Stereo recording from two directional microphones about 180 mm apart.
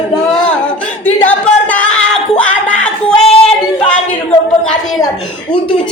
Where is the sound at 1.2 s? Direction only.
10° left (ahead or behind).